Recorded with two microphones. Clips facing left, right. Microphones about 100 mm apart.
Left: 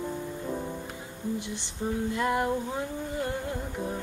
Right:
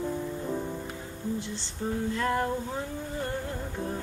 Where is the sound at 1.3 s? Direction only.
15° left (ahead or behind).